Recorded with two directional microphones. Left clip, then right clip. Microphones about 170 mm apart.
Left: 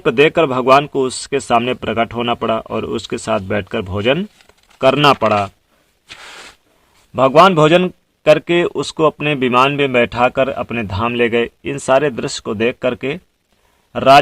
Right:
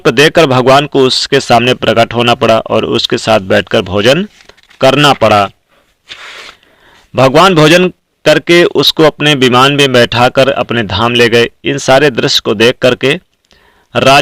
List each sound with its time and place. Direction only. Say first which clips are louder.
0.0 s a man's voice: right 6 dB; 25° right (ahead or behind)
7.2 s a man's voice: right 4 dB; 30° right (ahead or behind)